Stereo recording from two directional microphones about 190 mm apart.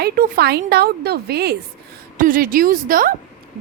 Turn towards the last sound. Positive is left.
turn(degrees=-45)  # may be behind; listen again after turning